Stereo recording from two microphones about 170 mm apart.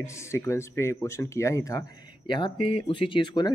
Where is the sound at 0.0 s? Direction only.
15° left (ahead or behind).